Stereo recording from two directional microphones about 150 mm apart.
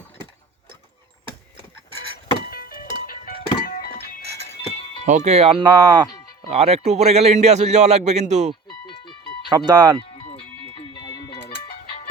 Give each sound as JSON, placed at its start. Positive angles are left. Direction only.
{"t": 2.5, "sound": "music", "side_deg": 80}
{"t": 5.0, "sound": "a man's voice", "side_deg": -50}
{"t": 5.7, "sound": "speech", "side_deg": -25}
{"t": 6.5, "sound": "a man's voice", "side_deg": -40}
{"t": 9.5, "sound": "speech", "side_deg": -30}
{"t": 10.2, "sound": "music", "side_deg": 40}
{"t": 10.8, "sound": "music", "side_deg": 25}